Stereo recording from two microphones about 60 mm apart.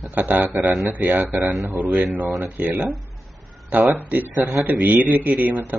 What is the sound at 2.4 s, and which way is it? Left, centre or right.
Speech, right.